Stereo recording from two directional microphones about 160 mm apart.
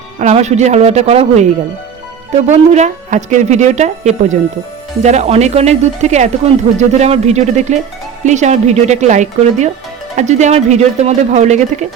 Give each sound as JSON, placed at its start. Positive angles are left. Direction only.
{"t": 0.2, "sound": "speech", "side_deg": -45}
{"t": 2.5, "sound": "speech", "side_deg": -45}